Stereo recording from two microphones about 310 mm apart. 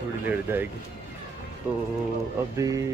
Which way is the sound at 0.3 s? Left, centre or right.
Centre.